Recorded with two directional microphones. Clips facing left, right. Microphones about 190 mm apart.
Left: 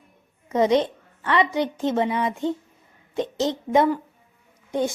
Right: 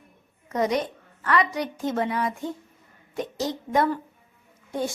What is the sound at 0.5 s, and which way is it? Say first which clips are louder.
A woman's voice: left 5 dB; 25° left (ahead or behind).